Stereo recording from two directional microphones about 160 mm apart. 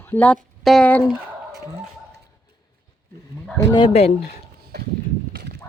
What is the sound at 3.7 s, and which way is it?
Speech, 30° left (ahead or behind).